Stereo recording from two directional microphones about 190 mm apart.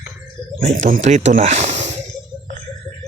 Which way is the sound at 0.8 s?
45° right (ahead or behind).